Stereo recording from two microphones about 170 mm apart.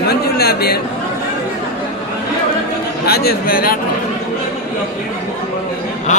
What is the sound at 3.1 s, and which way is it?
Speech, 65° left (ahead or behind).